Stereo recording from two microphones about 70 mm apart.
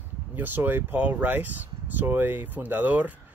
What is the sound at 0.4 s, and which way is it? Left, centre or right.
Speech, right.